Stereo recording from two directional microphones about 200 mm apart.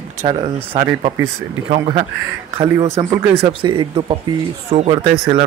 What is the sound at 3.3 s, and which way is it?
Speech, 25° right (ahead or behind).